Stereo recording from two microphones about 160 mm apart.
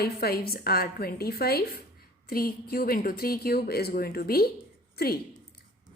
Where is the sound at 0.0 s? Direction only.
70° left (ahead or behind).